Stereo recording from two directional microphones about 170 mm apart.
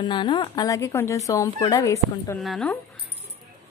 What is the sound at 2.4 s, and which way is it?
Speech, centre (ahead or behind).